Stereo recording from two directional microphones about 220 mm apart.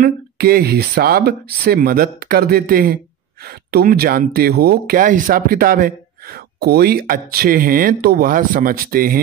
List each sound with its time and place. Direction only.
0.0 s speech: 45° right (ahead or behind)